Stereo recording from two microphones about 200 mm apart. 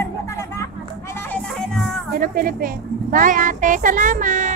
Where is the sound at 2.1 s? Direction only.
45° right (ahead or behind).